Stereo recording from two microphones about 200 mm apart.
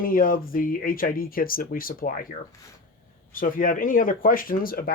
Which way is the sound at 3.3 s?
40° left (ahead or behind).